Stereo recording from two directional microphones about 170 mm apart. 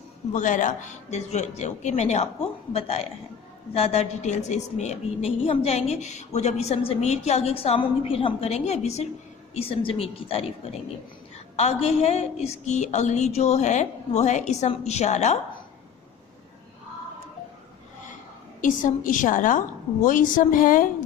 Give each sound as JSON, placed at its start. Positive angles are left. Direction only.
{"t": 0.3, "sound": "a woman's voice", "side_deg": 45}
{"t": 18.6, "sound": "a woman's voice", "side_deg": 50}